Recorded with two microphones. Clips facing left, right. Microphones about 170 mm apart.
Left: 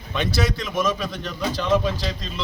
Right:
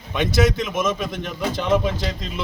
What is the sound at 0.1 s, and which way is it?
A man's voice, 20° right (ahead or behind).